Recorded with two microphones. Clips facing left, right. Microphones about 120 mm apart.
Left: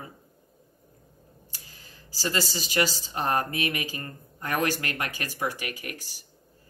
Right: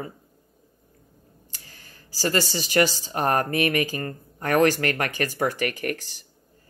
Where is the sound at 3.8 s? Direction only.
65° right (ahead or behind).